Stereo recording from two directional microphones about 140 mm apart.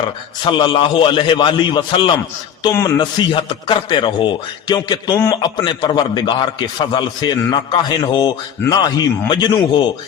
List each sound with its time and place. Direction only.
0.4 s a man's voice: 35° left (ahead or behind)
2.6 s a man's voice: 20° left (ahead or behind)
3.0 s a man's voice: 30° left (ahead or behind)